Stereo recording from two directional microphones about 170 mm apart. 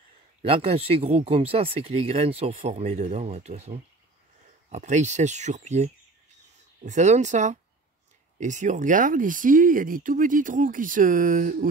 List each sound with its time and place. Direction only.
0.4 s speech: 35° right (ahead or behind); by 11.7 s 55° right (ahead or behind)